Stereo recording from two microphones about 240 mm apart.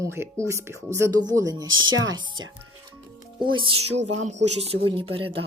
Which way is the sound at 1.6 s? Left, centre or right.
Right.